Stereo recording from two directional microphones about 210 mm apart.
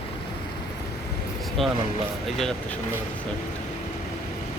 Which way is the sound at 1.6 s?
Centre (ahead or behind).